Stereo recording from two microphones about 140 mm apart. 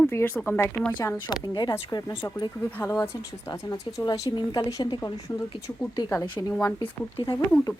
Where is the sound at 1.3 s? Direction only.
30° left (ahead or behind).